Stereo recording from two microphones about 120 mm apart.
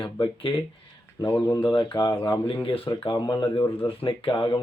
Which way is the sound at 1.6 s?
40° left (ahead or behind).